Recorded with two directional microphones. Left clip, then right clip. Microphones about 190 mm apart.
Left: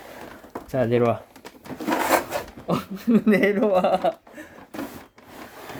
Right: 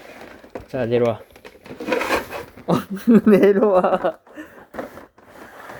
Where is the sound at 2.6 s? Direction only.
40° right (ahead or behind); by 4.4 s 20° right (ahead or behind).